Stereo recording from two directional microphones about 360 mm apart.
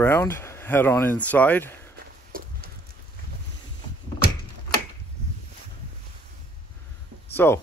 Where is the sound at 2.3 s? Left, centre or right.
Right.